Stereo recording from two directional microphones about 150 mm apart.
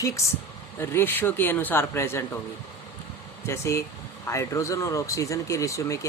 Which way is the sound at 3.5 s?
20° left (ahead or behind).